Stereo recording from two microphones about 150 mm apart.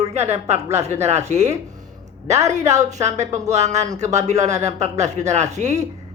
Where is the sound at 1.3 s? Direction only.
50° right (ahead or behind).